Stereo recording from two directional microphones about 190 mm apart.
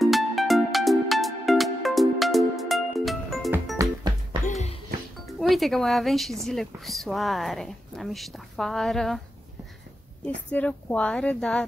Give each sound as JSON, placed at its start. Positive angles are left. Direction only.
{"t": 0.0, "sound": "music", "side_deg": 0}
{"t": 3.8, "sound": "music", "side_deg": -15}
{"t": 4.5, "sound": "music", "side_deg": 35}
{"t": 5.4, "sound": "a woman's voice", "side_deg": 0}
{"t": 10.2, "sound": "speech", "side_deg": 10}